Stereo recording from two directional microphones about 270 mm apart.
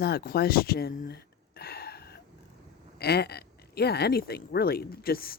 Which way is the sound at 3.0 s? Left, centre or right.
Left.